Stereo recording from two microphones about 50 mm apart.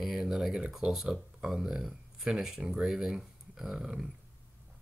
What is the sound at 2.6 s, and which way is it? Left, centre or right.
Speech, centre.